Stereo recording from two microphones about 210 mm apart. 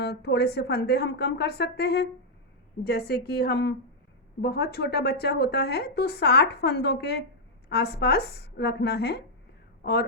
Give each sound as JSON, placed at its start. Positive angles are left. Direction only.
{"t": 0.0, "sound": "a woman's voice", "side_deg": 50}